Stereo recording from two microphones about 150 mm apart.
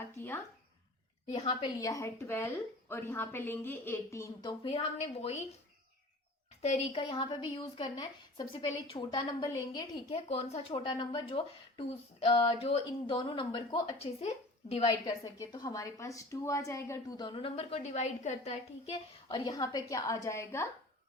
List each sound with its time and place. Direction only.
0.0 s speech: 15° left (ahead or behind)
1.3 s a woman's voice: 45° left (ahead or behind)
1.8 s a woman's voice: 20° left (ahead or behind)
4.6 s a woman's voice: 45° left (ahead or behind)
6.6 s a woman's voice: 45° left (ahead or behind); by 10.0 s 25° left (ahead or behind)
10.1 s speech: 45° left (ahead or behind)
15.0 s a woman's voice: 25° left (ahead or behind); by 18.9 s 50° left (ahead or behind)
19.3 s a woman's voice: 25° left (ahead or behind)